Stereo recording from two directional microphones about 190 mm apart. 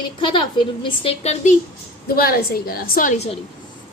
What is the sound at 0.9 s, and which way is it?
Speech, 30° left (ahead or behind).